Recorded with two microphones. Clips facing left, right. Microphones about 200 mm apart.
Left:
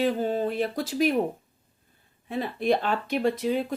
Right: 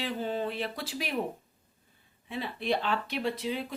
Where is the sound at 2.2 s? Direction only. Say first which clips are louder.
Left 7 dB; 45° left (ahead or behind).